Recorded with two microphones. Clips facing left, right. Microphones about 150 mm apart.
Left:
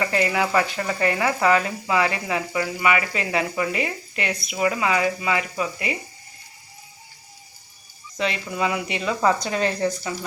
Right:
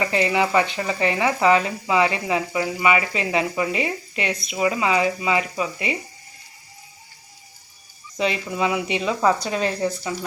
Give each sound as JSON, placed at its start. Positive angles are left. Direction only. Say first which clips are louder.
{"t": 0.0, "sound": "speech", "louder": "right 2 dB", "side_deg": -20}
{"t": 8.1, "sound": "speech", "louder": "right 2 dB", "side_deg": -5}